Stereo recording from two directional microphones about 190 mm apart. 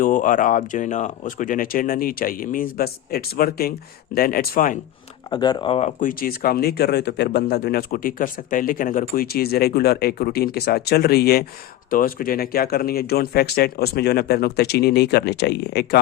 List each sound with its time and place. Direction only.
0.0 s speech: 45° left (ahead or behind)
5.3 s speech: 20° left (ahead or behind)
6.0 s speech: 50° left (ahead or behind)